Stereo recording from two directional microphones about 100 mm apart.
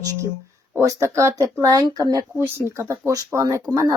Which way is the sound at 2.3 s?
20° right (ahead or behind).